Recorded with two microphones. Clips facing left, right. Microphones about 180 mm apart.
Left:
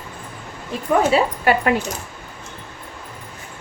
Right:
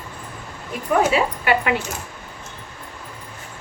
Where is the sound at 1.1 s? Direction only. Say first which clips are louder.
Left 2 dB; 40° left (ahead or behind).